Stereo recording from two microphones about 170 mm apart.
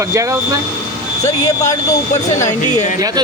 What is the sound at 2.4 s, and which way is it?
Speech, 45° left (ahead or behind).